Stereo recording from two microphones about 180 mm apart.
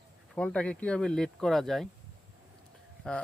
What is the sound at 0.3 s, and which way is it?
Speech, 5° left (ahead or behind).